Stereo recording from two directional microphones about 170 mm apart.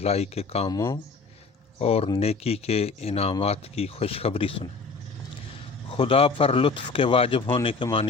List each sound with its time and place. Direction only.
0.0 s speech: 40° left (ahead or behind)
0.7 s speech: 15° left (ahead or behind)
1.8 s speech: 35° left (ahead or behind)
5.9 s speech: 30° left (ahead or behind)